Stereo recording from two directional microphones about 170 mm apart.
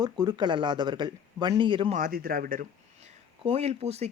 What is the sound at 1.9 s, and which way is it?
Speech, 55° right (ahead or behind).